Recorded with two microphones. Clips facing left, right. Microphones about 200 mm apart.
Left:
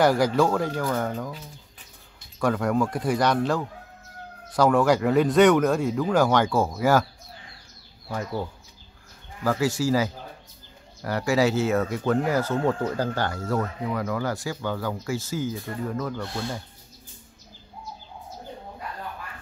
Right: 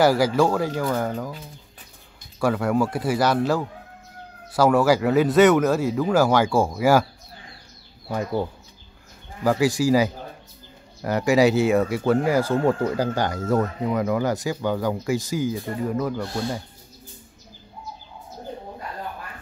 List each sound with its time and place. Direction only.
0.0 s speech: 5° right (ahead or behind)
2.4 s speech: 5° right (ahead or behind)
8.1 s speech: 20° right (ahead or behind)